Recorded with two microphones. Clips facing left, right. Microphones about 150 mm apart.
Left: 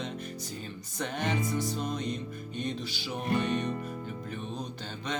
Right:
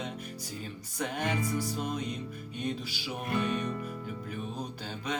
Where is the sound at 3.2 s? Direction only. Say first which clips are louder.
Left 2 dB; 35° left (ahead or behind).